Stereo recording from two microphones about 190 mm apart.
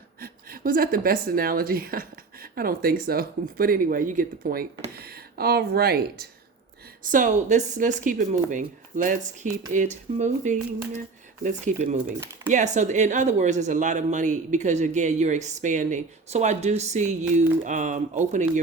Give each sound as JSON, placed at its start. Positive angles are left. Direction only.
{"t": 0.2, "sound": "a woman's voice", "side_deg": -50}
{"t": 7.0, "sound": "speech", "side_deg": -45}